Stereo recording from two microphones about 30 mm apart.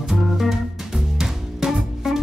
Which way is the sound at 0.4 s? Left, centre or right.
Centre.